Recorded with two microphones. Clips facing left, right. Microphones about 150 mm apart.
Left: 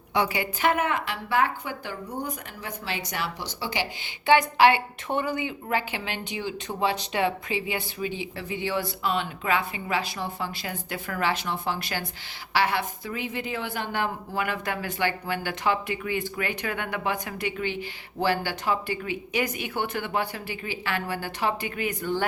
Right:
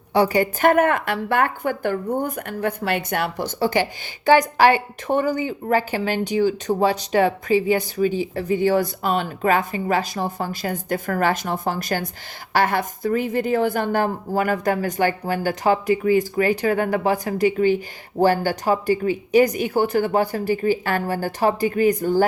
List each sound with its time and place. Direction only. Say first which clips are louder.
0.1 s a woman's voice: right 8 dB; 40° right (ahead or behind)